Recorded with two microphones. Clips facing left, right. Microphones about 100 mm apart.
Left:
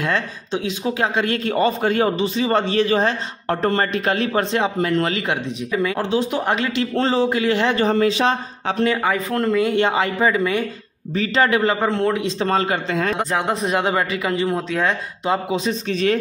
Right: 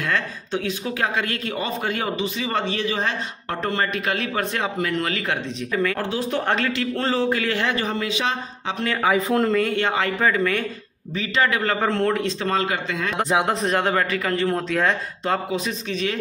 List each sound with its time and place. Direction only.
0.0 s speech: 20° left (ahead or behind)
5.3 s a man's voice: 15° left (ahead or behind)
7.7 s speech: 35° left (ahead or behind)
9.0 s speech: 5° right (ahead or behind)
9.6 s speech: 20° left (ahead or behind)
11.1 s speech: 30° left (ahead or behind)
11.8 s speech: 5° left (ahead or behind)
12.3 s speech: 30° left (ahead or behind)
13.5 s speech: 5° left (ahead or behind)
15.9 s speech: 40° left (ahead or behind)